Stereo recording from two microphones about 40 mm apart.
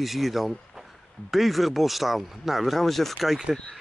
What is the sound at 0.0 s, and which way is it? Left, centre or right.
Speech, centre.